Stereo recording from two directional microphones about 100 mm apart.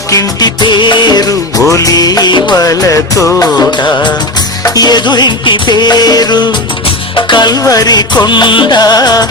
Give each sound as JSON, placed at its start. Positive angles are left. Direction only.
{"t": 0.1, "sound": "music", "side_deg": 40}
{"t": 2.6, "sound": "music", "side_deg": 35}
{"t": 3.7, "sound": "music", "side_deg": 50}